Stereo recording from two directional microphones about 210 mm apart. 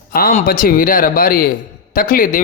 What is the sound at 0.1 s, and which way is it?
A man's voice, 45° left (ahead or behind).